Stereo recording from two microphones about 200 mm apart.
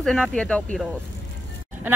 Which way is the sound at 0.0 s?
Centre (ahead or behind).